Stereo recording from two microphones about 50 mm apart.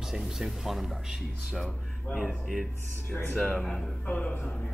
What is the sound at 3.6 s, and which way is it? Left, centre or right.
Speech, centre.